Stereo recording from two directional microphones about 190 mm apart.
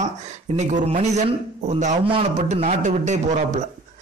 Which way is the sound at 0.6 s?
35° right (ahead or behind).